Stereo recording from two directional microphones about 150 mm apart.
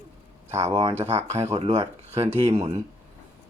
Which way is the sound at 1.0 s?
45° right (ahead or behind).